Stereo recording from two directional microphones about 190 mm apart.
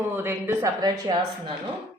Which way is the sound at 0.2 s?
15° right (ahead or behind).